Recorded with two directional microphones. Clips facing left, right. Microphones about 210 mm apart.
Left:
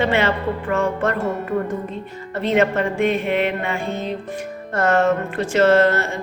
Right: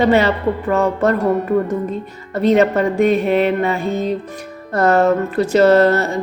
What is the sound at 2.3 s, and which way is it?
Speech, 40° right (ahead or behind).